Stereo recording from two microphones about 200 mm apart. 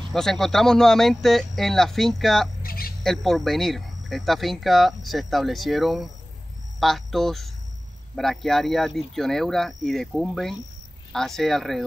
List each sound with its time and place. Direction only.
0.1 s speech: centre (ahead or behind)
2.6 s bird: 45° left (ahead or behind)
3.0 s speech: centre (ahead or behind)